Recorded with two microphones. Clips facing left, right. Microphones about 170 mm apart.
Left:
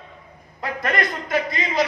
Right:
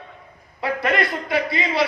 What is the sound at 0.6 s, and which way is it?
A man's voice, 45° left (ahead or behind).